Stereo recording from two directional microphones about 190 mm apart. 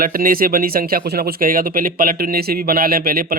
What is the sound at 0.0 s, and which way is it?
Speech, 50° right (ahead or behind).